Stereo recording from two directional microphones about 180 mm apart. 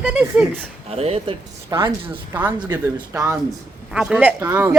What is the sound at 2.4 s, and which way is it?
Speech, 10° right (ahead or behind).